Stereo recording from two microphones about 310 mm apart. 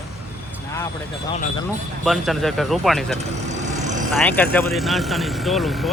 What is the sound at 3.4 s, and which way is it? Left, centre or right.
Vehicle, right.